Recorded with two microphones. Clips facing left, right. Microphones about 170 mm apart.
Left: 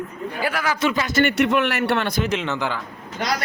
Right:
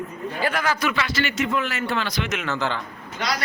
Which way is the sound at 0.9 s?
50° left (ahead or behind).